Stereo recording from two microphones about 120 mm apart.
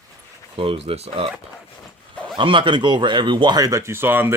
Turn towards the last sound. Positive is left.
turn(degrees=-20)  # may be behind; listen again after turning